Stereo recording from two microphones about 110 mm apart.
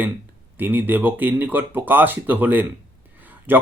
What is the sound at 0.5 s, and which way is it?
Speech, 15° right (ahead or behind).